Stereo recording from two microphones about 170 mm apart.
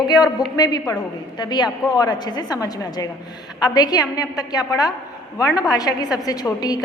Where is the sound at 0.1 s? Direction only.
20° left (ahead or behind).